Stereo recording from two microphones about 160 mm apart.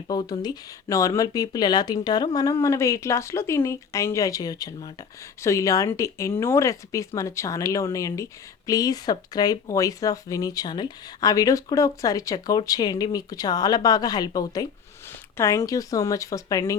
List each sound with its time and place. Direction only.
0.1 s speech: 25° left (ahead or behind)